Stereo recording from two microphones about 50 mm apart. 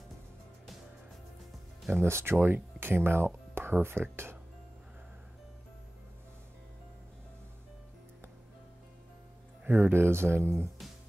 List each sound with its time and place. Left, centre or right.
2.0 s speech: right
2.4 s speech: right
9.7 s speech: right